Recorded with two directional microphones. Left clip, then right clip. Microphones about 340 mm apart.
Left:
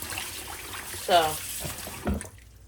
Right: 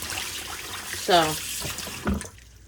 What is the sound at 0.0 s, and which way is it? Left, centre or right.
Trickle, centre.